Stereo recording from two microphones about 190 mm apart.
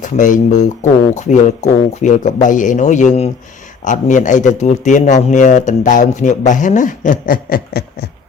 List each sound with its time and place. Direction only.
0.0 s a man's voice: 40° left (ahead or behind)